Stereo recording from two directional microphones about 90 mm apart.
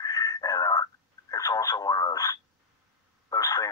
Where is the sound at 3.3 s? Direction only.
40° left (ahead or behind).